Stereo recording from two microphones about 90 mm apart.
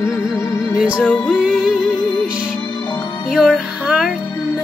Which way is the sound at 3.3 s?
Centre (ahead or behind).